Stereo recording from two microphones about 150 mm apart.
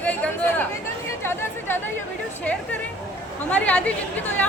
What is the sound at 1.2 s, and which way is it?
Chatter, 15° left (ahead or behind).